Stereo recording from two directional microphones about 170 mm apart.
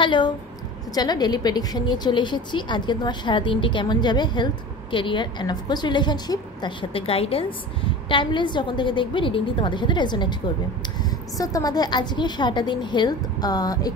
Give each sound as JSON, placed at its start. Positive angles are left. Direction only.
{"t": 0.0, "sound": "a woman's voice", "side_deg": 25}
{"t": 11.3, "sound": "a woman's voice", "side_deg": 20}